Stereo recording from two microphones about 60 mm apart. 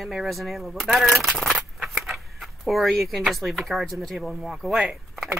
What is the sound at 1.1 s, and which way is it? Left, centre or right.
Keys jangling, centre.